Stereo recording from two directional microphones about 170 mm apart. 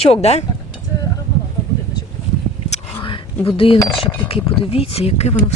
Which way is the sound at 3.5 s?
30° left (ahead or behind).